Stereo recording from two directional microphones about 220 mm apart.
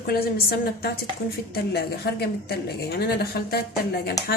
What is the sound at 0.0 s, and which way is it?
A woman's voice, 45° left (ahead or behind).